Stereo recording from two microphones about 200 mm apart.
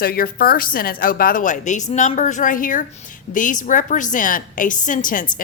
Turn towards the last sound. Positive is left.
turn(degrees=40)  # may be behind; listen again after turning